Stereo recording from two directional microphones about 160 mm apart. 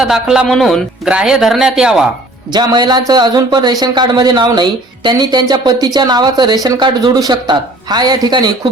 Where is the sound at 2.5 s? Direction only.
25° right (ahead or behind).